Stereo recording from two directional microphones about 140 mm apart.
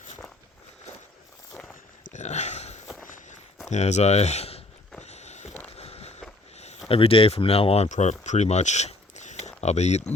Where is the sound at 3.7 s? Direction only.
55° left (ahead or behind).